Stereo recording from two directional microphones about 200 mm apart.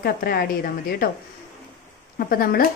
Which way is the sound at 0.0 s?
50° left (ahead or behind).